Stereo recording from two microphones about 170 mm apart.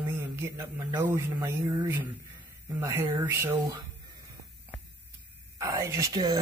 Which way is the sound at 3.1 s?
25° right (ahead or behind).